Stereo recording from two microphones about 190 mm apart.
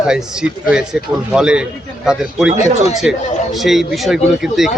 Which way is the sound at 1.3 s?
5° right (ahead or behind).